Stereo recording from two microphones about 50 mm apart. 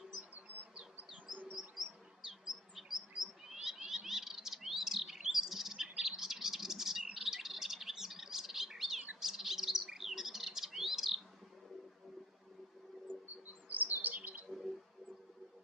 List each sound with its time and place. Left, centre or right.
0.7 s bee: right
1.5 s chirp: centre
2.4 s bird: centre
13.3 s chirp: right